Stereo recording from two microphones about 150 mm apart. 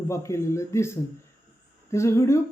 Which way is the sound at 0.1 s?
20° left (ahead or behind).